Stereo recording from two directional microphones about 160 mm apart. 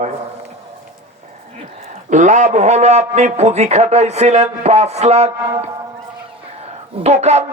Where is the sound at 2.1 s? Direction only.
50° right (ahead or behind).